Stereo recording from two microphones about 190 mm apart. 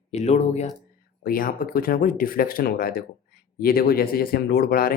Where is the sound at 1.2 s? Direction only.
50° left (ahead or behind).